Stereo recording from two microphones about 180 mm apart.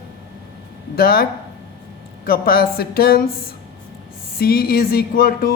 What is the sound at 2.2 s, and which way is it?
A woman's voice, 55° left (ahead or behind).